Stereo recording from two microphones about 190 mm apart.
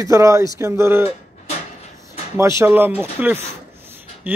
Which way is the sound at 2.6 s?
10° right (ahead or behind).